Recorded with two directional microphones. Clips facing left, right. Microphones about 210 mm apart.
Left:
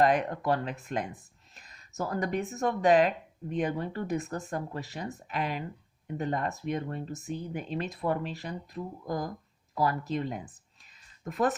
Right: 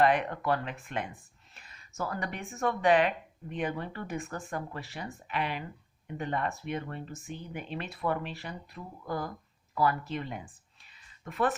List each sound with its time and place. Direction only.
0.0 s speech: 40° left (ahead or behind)